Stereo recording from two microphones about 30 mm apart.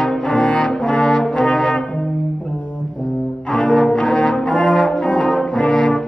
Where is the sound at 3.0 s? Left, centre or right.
Left.